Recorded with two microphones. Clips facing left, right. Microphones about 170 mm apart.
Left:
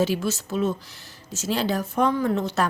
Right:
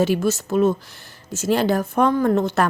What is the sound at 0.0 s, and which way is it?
A woman's voice, 50° right (ahead or behind).